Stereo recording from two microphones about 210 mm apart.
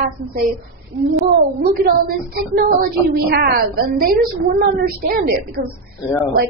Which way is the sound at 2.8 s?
45° right (ahead or behind).